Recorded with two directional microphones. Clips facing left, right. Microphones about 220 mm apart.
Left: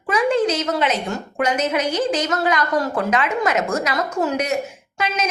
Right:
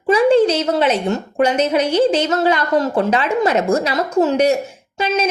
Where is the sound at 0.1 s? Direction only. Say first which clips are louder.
Right 6 dB; 30° right (ahead or behind).